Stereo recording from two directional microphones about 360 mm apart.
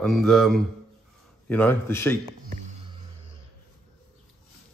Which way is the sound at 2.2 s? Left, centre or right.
Right.